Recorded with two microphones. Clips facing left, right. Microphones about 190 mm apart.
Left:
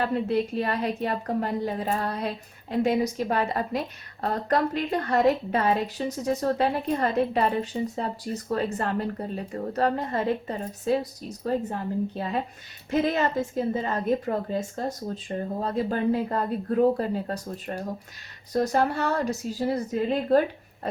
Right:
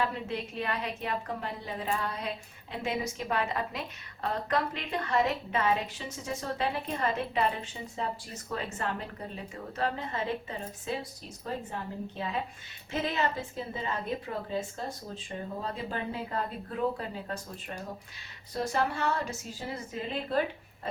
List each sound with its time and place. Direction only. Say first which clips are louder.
0.0 s a woman's voice: left 8 dB; 40° left (ahead or behind)